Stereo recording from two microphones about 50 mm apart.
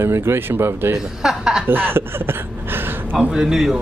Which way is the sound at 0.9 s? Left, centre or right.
Centre.